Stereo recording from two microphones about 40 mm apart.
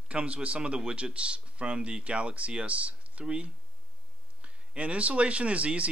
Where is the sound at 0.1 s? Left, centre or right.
Right.